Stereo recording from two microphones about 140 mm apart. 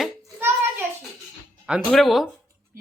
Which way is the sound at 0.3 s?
15° right (ahead or behind).